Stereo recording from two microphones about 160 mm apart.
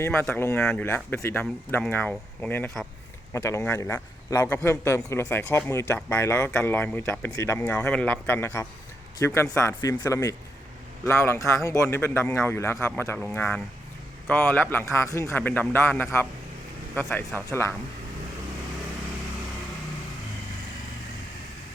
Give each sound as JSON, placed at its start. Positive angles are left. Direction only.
{"t": 0.1, "sound": "a man's voice", "side_deg": 10}
{"t": 7.8, "sound": "a man's voice", "side_deg": 5}